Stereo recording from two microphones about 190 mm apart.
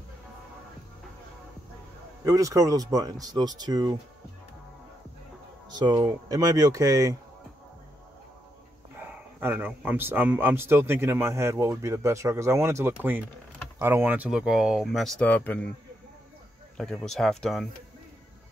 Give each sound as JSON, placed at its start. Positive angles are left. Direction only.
{"t": 2.2, "sound": "speech", "side_deg": -15}
{"t": 5.7, "sound": "speech", "side_deg": -20}
{"t": 9.0, "sound": "speech", "side_deg": -10}
{"t": 16.7, "sound": "speech", "side_deg": 5}